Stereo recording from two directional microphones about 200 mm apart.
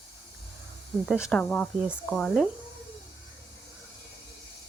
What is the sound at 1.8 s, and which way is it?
Speech, 5° right (ahead or behind).